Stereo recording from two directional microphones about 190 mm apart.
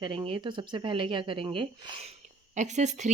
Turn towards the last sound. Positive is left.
turn(degrees=-40)  # may be behind; listen again after turning